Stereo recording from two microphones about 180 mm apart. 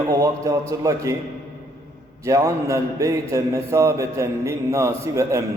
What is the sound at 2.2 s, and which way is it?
A man's voice, 15° right (ahead or behind).